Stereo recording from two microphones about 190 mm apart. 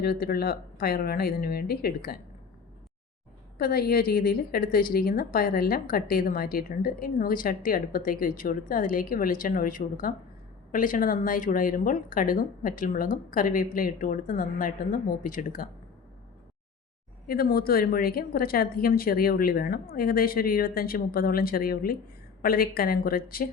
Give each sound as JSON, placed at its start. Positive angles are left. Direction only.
{"t": 0.0, "sound": "a woman's voice", "side_deg": 55}
{"t": 3.6, "sound": "a woman's voice", "side_deg": 50}
{"t": 17.2, "sound": "a woman's voice", "side_deg": 50}